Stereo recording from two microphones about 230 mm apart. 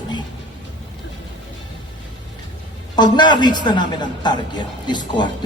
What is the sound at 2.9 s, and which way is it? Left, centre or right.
A man's voice, centre.